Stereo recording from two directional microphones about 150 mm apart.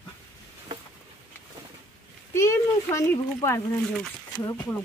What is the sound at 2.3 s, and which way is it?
Speech, 20° left (ahead or behind).